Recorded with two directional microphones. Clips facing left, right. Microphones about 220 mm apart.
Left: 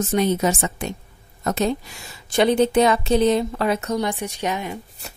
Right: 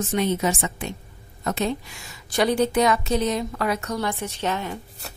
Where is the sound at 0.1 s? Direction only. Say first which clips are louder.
Left 3 dB; 40° left (ahead or behind).